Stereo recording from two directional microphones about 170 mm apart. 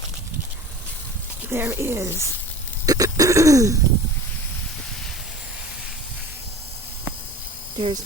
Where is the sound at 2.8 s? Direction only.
20° right (ahead or behind).